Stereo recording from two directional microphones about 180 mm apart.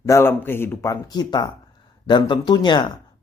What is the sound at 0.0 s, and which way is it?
Speech, 15° left (ahead or behind).